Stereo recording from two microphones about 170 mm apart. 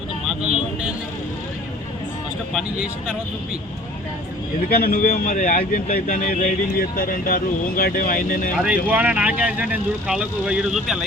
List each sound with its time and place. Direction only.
4.7 s a man's voice: 60° left (ahead or behind)
8.5 s speech: 10° right (ahead or behind)